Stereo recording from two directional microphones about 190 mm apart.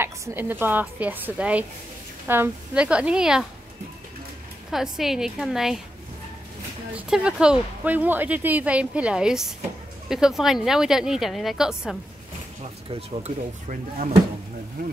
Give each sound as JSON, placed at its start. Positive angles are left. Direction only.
{"t": 0.0, "sound": "a woman's voice", "side_deg": -10}
{"t": 4.6, "sound": "a woman's voice", "side_deg": 0}
{"t": 7.1, "sound": "a woman's voice", "side_deg": -5}
{"t": 13.1, "sound": "speech", "side_deg": -35}